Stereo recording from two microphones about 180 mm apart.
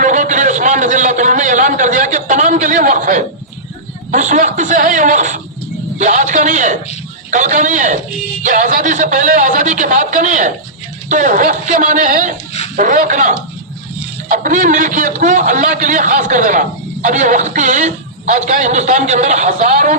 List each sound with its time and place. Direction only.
0.0 s a man's voice: 45° right (ahead or behind)